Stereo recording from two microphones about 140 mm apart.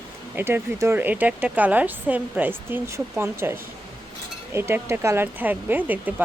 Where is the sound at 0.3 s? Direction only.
15° right (ahead or behind).